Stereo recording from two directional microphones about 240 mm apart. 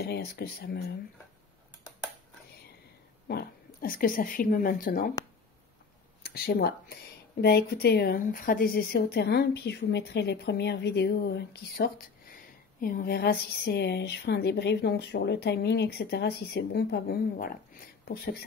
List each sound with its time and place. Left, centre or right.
0.0 s speech: left
3.3 s speech: left
6.2 s speech: left